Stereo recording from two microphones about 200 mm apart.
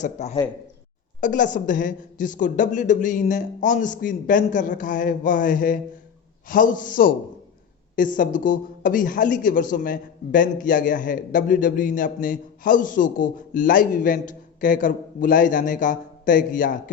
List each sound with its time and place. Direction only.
0.0 s a woman's voice: 35° left (ahead or behind)